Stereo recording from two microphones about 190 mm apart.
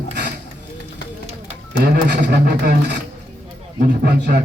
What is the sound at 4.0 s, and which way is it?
Speech, 60° right (ahead or behind).